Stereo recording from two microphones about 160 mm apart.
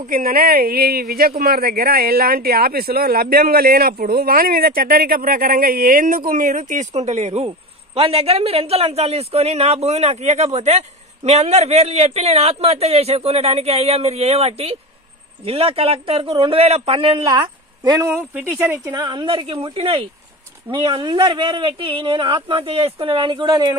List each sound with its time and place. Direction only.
0.0 s speech: 65° right (ahead or behind); by 17.2 s 35° right (ahead or behind)
17.3 s a woman's voice: 25° right (ahead or behind)
18.1 s speech: 10° right (ahead or behind)
18.9 s speech: 30° right (ahead or behind)